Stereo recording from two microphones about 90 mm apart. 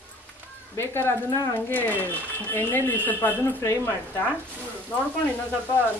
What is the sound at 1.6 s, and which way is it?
Speech, 20° left (ahead or behind).